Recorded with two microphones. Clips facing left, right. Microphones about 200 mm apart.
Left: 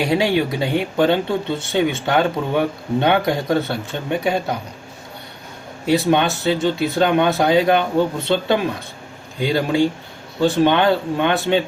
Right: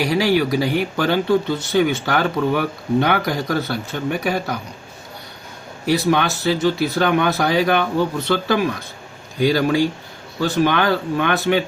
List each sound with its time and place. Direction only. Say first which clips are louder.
0.0 s speech: even; 25° left (ahead or behind)
5.8 s speech: left 1 dB; 25° left (ahead or behind)